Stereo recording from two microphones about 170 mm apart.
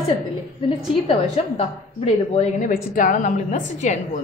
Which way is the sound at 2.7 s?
50° left (ahead or behind).